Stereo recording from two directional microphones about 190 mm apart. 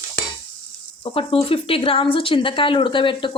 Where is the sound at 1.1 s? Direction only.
30° left (ahead or behind).